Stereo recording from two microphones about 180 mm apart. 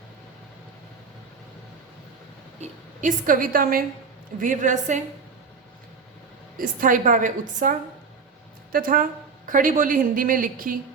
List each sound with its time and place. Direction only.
2.6 s a woman's voice: 45° right (ahead or behind)
6.6 s a woman's voice: 50° right (ahead or behind)